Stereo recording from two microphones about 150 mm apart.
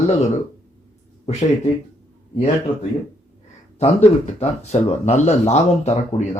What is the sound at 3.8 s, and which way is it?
Speech, 45° left (ahead or behind).